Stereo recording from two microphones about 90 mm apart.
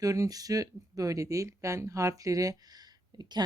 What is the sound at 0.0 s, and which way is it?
Speech, 40° right (ahead or behind).